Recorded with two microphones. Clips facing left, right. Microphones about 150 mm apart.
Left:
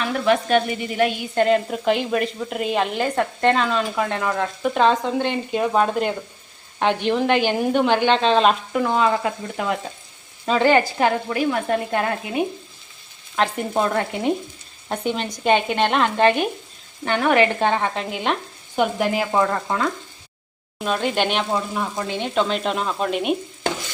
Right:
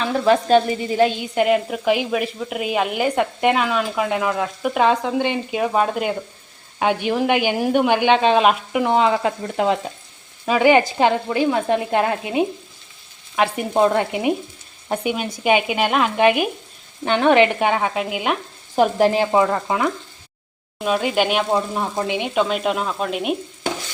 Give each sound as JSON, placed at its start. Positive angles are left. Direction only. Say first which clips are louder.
{"t": 0.0, "sound": "speech", "louder": "right 2 dB", "side_deg": -30}
{"t": 1.4, "sound": "a woman's voice", "louder": "even", "side_deg": -10}
{"t": 8.9, "sound": "speech", "louder": "right 3 dB", "side_deg": -20}
{"t": 10.4, "sound": "speech", "louder": "right 2 dB", "side_deg": -10}
{"t": 13.3, "sound": "a woman's voice", "louder": "right 2 dB", "side_deg": -10}
{"t": 13.7, "sound": "a woman's voice", "louder": "right 5 dB", "side_deg": -20}
{"t": 17.1, "sound": "a woman's voice", "louder": "right 3 dB", "side_deg": -20}
{"t": 18.8, "sound": "frying", "louder": "right 5 dB", "side_deg": -35}
{"t": 19.3, "sound": "a woman's voice", "louder": "right 3 dB", "side_deg": -15}
{"t": 21.9, "sound": "speech", "louder": "right 2 dB", "side_deg": -15}